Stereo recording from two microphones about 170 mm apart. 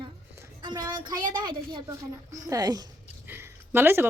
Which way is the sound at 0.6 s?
25° right (ahead or behind).